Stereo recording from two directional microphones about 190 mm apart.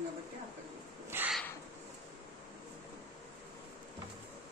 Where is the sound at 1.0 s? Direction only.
10° right (ahead or behind).